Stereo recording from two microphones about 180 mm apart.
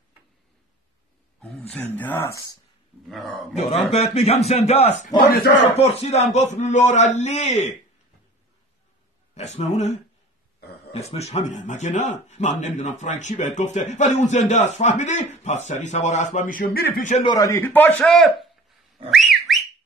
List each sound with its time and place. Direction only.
1.4 s a man's voice: 5° left (ahead or behind)
3.1 s a man's voice: centre (ahead or behind)
3.5 s a man's voice: 35° left (ahead or behind)
5.1 s speech: 60° left (ahead or behind)
5.8 s a man's voice: 35° left (ahead or behind)
9.3 s a man's voice: 40° left (ahead or behind)
17.2 s a man's voice: 20° left (ahead or behind); by 18.5 s centre (ahead or behind)
19.0 s whistling: centre (ahead or behind)